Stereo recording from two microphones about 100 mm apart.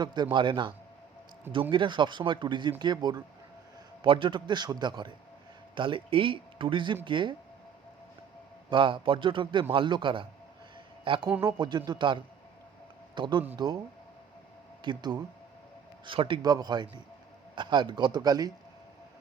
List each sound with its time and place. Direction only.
0.0 s speech: 50° right (ahead or behind)
1.7 s speech: 55° right (ahead or behind)
4.0 s speech: 60° right (ahead or behind)
8.7 s speech: 60° right (ahead or behind)
14.8 s speech: 45° right (ahead or behind)
16.0 s speech: 60° right (ahead or behind)
16.4 s speech: 40° right (ahead or behind)